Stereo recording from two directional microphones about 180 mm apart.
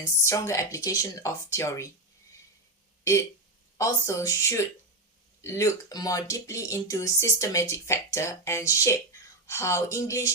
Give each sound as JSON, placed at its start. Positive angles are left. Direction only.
{"t": 0.0, "sound": "speech", "side_deg": 15}
{"t": 3.0, "sound": "speech", "side_deg": 15}